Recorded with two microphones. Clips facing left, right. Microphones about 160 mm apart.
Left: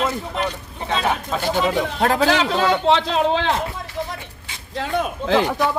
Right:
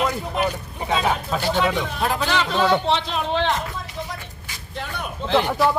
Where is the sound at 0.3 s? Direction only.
10° right (ahead or behind).